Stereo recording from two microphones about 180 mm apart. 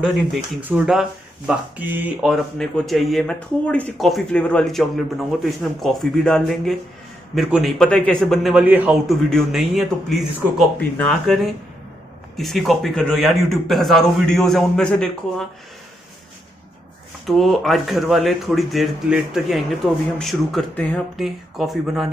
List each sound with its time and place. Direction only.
0.3 s speech: 10° right (ahead or behind)
2.6 s speech: centre (ahead or behind)
17.3 s speech: centre (ahead or behind)